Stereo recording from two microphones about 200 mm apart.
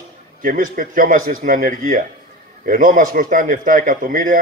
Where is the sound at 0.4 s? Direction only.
45° right (ahead or behind).